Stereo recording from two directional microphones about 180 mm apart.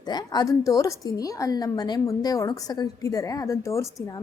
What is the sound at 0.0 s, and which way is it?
A woman's voice, 25° left (ahead or behind).